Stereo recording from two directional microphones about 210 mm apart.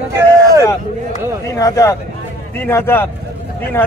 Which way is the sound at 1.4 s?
15° left (ahead or behind).